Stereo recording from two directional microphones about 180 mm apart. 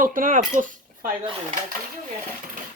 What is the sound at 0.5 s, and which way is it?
Cutlery, 45° right (ahead or behind).